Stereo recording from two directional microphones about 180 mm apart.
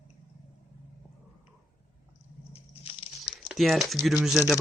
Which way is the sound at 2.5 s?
30° left (ahead or behind).